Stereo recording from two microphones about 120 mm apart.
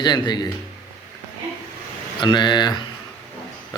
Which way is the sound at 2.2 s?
40° left (ahead or behind).